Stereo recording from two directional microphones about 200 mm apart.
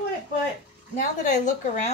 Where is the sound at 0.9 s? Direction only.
40° left (ahead or behind).